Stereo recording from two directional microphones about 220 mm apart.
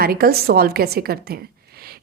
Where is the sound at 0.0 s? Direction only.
45° right (ahead or behind).